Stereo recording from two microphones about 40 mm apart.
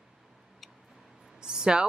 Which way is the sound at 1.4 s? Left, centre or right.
Centre.